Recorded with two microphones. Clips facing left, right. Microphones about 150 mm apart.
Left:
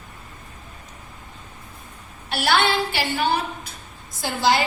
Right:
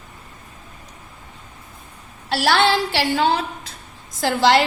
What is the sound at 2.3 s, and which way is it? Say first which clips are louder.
A woman's voice: right 3 dB; 90° right.